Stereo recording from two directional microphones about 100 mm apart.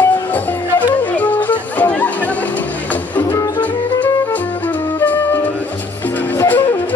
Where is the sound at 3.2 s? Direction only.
30° left (ahead or behind).